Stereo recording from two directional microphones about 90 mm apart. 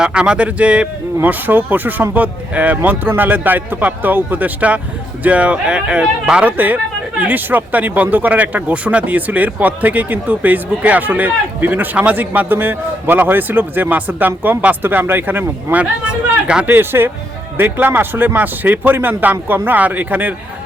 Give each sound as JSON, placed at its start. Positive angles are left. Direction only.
{"t": 0.0, "sound": "speech", "side_deg": -10}
{"t": 16.7, "sound": "speech", "side_deg": -25}